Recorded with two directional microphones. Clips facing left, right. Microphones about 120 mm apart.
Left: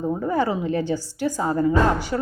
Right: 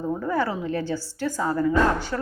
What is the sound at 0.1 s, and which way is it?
A woman's voice, 15° left (ahead or behind).